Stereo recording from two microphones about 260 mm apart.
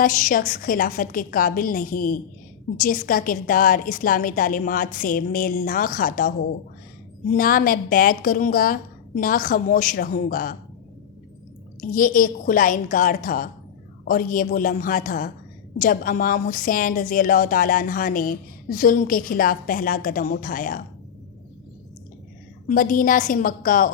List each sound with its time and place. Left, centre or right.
0.0 s a woman's voice: left
11.8 s a woman's voice: left
22.7 s a woman's voice: left